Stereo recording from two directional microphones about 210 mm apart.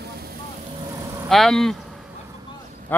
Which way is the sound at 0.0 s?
50° right (ahead or behind).